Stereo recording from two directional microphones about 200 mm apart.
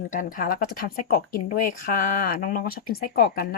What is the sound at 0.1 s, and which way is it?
Speech, 45° left (ahead or behind).